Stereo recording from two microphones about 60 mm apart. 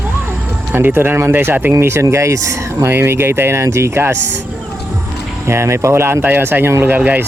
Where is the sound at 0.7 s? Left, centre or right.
Right.